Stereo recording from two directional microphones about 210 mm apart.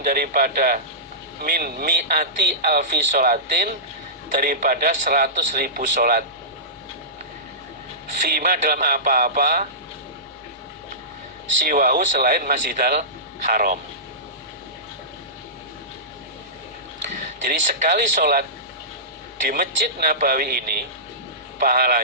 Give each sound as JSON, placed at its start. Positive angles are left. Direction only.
{"t": 0.0, "sound": "speech", "side_deg": -45}
{"t": 8.2, "sound": "speech", "side_deg": -40}
{"t": 11.6, "sound": "speech", "side_deg": -45}
{"t": 17.5, "sound": "speech", "side_deg": -40}